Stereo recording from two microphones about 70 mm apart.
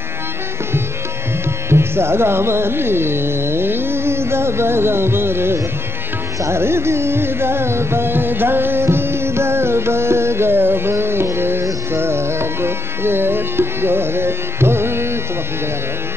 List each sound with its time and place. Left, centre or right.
1.7 s speech: right
6.4 s music: right